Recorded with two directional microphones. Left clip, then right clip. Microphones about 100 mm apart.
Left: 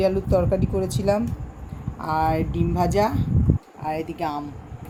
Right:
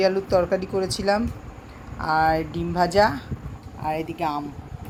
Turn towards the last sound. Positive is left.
turn(degrees=0)  # may be behind; listen again after turning